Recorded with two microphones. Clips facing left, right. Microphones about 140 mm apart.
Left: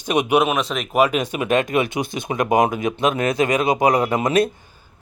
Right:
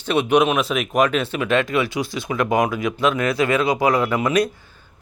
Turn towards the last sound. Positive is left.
turn(degrees=25)  # may be behind; listen again after turning